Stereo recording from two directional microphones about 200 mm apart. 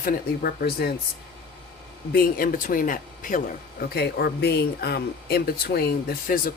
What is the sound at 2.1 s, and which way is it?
Speech, 45° left (ahead or behind).